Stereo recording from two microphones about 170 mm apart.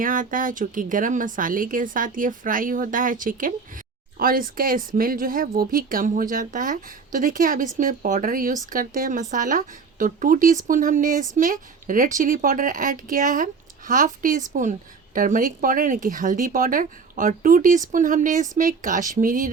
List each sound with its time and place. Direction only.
0.0 s a woman's voice: 55° right (ahead or behind)